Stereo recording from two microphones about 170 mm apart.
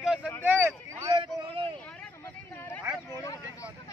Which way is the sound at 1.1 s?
30° right (ahead or behind).